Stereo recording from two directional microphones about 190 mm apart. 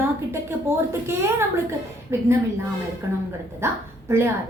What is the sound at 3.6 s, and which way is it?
Speech, 15° right (ahead or behind).